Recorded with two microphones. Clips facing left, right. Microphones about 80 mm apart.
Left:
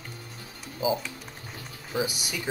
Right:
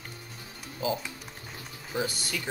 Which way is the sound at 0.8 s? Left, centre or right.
Centre.